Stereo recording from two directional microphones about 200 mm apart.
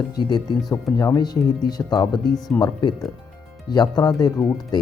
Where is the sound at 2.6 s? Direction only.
20° left (ahead or behind).